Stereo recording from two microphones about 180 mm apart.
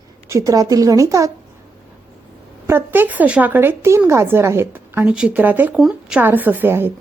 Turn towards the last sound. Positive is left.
turn(degrees=-10)  # may be behind; listen again after turning